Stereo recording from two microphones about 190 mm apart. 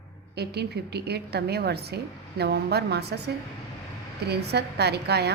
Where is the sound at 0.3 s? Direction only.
60° right (ahead or behind).